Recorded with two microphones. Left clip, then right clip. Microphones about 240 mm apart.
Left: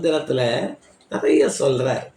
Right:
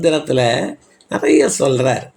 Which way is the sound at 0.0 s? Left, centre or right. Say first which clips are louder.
Right 5 dB; right.